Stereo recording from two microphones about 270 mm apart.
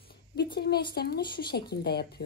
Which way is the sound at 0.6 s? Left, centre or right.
Left.